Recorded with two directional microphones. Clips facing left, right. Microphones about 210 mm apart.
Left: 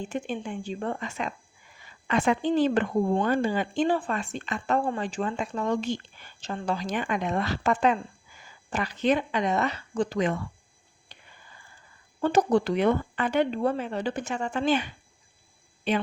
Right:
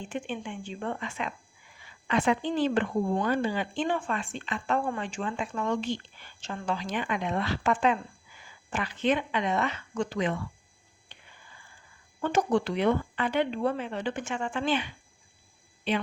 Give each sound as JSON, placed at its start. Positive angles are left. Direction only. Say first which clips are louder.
{"t": 0.1, "sound": "speech", "louder": "left 3 dB", "side_deg": 40}
{"t": 11.1, "sound": "a sound", "louder": "left 2 dB", "side_deg": 40}
{"t": 12.2, "sound": "speech", "louder": "left 3 dB", "side_deg": 35}